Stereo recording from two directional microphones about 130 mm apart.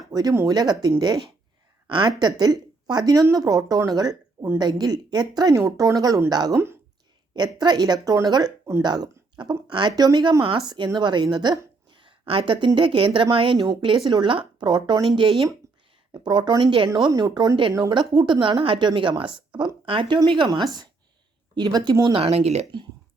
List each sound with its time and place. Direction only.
0.1 s a woman's voice: 30° right (ahead or behind)
16.9 s a woman's voice: 25° right (ahead or behind)
22.2 s speech: 50° right (ahead or behind)